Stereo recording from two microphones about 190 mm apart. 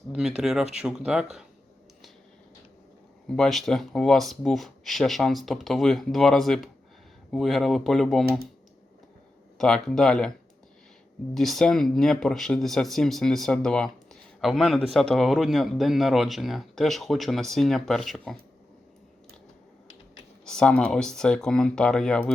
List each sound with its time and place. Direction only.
0.1 s speech: 5° right (ahead or behind)
3.2 s speech: 5° left (ahead or behind)
9.6 s speech: 5° left (ahead or behind)
11.3 s speech: centre (ahead or behind)
20.4 s speech: 5° left (ahead or behind)